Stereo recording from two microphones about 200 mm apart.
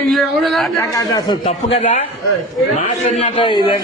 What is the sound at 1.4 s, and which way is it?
A man's voice, 30° left (ahead or behind).